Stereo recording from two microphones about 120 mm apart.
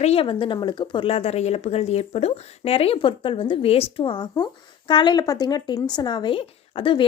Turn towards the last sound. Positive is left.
turn(degrees=45)  # may be behind; listen again after turning